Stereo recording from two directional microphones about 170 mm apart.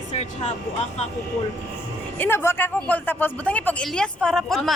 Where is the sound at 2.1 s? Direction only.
15° left (ahead or behind).